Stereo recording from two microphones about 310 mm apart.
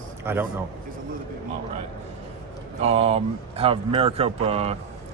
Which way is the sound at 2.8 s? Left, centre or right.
Centre.